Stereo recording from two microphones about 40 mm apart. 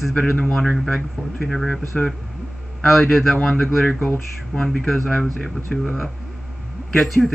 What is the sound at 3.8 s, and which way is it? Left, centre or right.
Speech, left.